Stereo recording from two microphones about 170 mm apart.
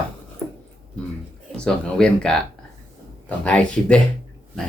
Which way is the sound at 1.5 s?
5° left (ahead or behind).